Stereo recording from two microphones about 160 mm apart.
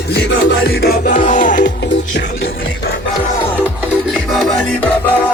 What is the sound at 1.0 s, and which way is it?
Music, 55° left (ahead or behind).